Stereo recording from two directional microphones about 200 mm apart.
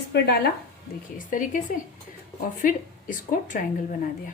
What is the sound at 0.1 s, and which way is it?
Speech, 55° left (ahead or behind).